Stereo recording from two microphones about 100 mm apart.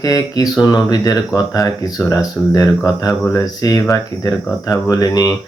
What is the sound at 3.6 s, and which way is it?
Speech, 35° left (ahead or behind).